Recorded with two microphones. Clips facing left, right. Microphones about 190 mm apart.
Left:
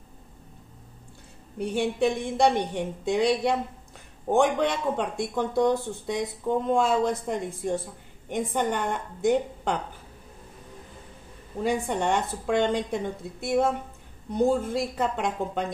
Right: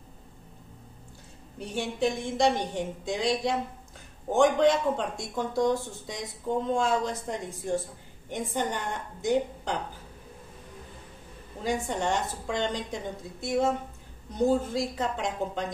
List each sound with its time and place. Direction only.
1.6 s a woman's voice: 60° left (ahead or behind)
11.6 s a woman's voice: 60° left (ahead or behind)